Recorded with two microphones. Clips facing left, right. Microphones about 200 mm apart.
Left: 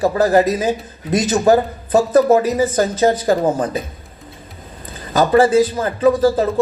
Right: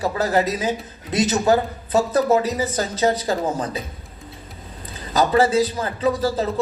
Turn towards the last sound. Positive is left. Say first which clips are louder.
# left 7 dB
turn(degrees=50)  # may be behind; listen again after turning